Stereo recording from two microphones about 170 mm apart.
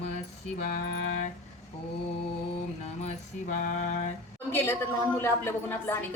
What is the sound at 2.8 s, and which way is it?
Mantra, 45° left (ahead or behind).